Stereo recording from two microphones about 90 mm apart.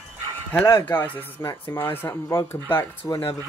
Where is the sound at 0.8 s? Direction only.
20° left (ahead or behind).